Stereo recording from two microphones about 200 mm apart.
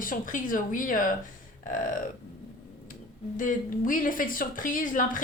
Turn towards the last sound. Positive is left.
turn(degrees=40)  # may be behind; listen again after turning